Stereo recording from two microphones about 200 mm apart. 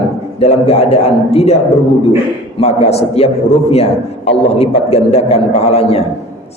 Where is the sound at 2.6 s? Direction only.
30° left (ahead or behind).